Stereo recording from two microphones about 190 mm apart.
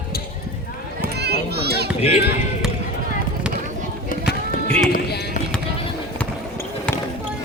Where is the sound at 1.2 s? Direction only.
55° right (ahead or behind).